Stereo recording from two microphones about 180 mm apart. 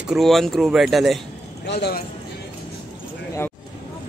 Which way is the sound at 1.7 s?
65° left (ahead or behind).